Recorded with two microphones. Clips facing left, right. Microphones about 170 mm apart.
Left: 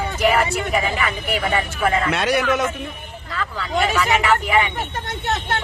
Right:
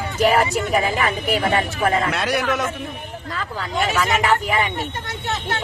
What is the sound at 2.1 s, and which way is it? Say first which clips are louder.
Speech: left 2 dB; centre (ahead or behind).